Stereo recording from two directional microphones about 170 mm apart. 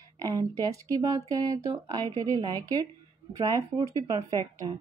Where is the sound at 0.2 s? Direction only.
20° right (ahead or behind).